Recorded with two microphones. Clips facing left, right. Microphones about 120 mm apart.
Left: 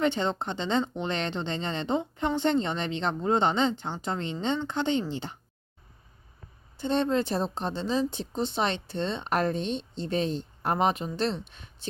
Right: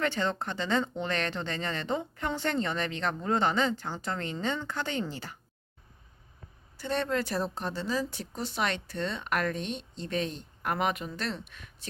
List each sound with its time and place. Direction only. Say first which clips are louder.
0.0 s speech: left 3 dB; 20° left (ahead or behind)
6.7 s speech: left 4 dB; 25° left (ahead or behind)